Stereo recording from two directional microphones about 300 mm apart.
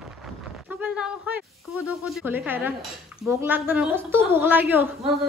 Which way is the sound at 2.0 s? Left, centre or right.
Centre.